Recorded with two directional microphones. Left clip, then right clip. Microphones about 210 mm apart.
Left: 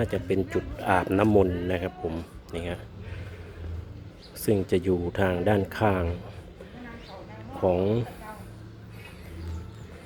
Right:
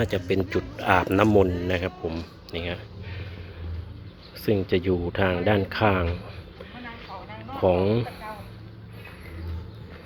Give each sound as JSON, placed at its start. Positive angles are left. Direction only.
{"t": 0.0, "sound": "speech", "side_deg": 5}
{"t": 4.4, "sound": "speech", "side_deg": 20}
{"t": 7.6, "sound": "speech", "side_deg": 10}